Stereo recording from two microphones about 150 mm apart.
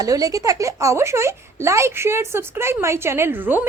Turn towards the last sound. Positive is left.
turn(degrees=-15)  # may be behind; listen again after turning